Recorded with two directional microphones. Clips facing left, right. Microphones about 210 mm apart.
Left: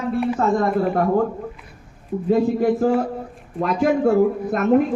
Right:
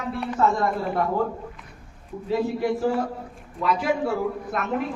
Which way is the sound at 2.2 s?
45° left (ahead or behind).